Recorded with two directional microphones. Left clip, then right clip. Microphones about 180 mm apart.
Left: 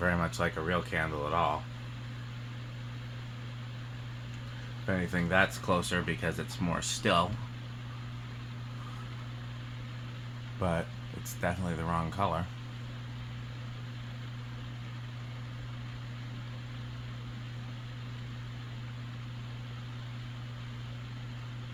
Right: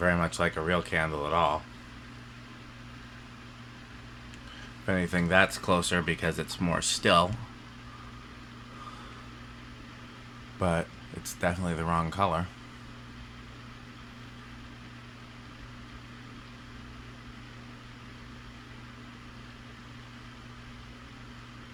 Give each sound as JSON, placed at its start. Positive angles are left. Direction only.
{"t": 0.0, "sound": "speech", "side_deg": -35}
{"t": 4.9, "sound": "speech", "side_deg": -50}
{"t": 10.6, "sound": "speech", "side_deg": -40}